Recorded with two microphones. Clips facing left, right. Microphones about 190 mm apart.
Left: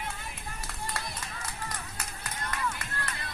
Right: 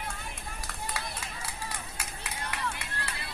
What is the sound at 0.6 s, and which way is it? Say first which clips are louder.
Run: even; centre (ahead or behind).